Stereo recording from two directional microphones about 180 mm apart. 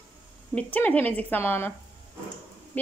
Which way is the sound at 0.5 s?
10° left (ahead or behind).